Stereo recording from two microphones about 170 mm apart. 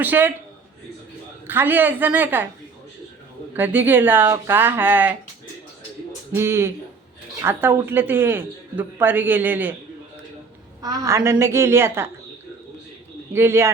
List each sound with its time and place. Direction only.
0.0 s a man's voice: 10° right (ahead or behind)
1.5 s a man's voice: 10° right (ahead or behind)
3.5 s a man's voice: 10° right (ahead or behind)
6.3 s a man's voice: 15° right (ahead or behind)
10.8 s a man's voice: 15° right (ahead or behind)
13.3 s a man's voice: 15° right (ahead or behind)